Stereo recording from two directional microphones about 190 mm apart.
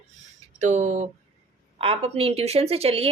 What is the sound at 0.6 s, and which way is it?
A woman's voice, 40° right (ahead or behind).